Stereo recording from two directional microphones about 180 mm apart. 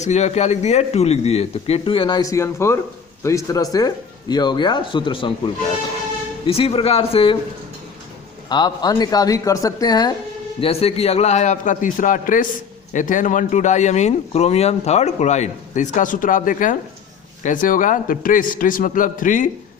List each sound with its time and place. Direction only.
0.0 s a man's voice: 40° left (ahead or behind)
6.4 s a man's voice: 30° left (ahead or behind)
8.4 s speech: 25° left (ahead or behind)
10.6 s a man's voice: 35° left (ahead or behind)